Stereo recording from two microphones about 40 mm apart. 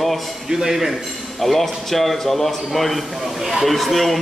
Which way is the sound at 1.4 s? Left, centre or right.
Centre.